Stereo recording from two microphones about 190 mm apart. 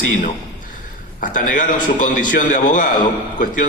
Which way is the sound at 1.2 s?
45° left (ahead or behind).